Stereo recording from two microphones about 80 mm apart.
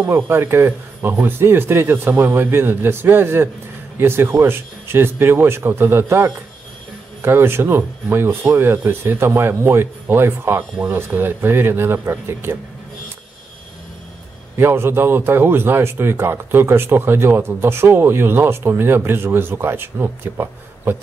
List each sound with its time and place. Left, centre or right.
0.0 s a man's voice: right
14.6 s a man's voice: right